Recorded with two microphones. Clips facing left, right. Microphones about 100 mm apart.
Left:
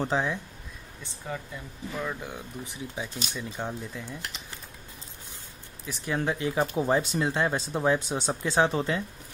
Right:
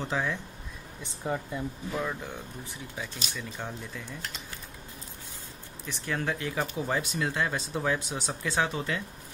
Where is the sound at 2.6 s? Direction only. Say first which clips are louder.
Left 3 dB; 20° left (ahead or behind).